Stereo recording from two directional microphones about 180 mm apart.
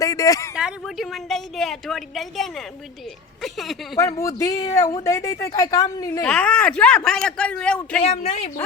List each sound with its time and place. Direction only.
0.0 s speech: 20° left (ahead or behind)
0.5 s a woman's voice: centre (ahead or behind)
3.9 s speech: 20° left (ahead or behind)
6.2 s a woman's voice: 5° left (ahead or behind)
8.0 s speech: 35° left (ahead or behind)